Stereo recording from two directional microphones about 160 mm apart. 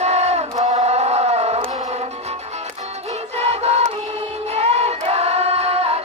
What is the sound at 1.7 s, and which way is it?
Music, 45° right (ahead or behind).